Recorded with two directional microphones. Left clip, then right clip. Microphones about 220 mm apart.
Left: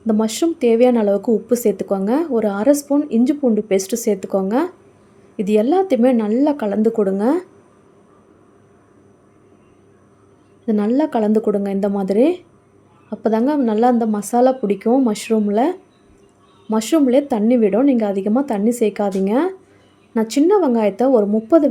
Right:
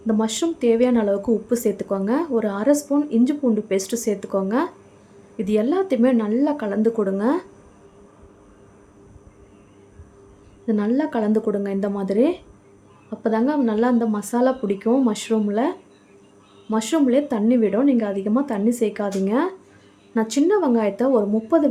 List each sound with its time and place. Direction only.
0.1 s speech: 15° left (ahead or behind)
10.7 s a woman's voice: 20° left (ahead or behind)